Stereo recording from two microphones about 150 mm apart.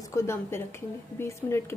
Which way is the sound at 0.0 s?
20° left (ahead or behind).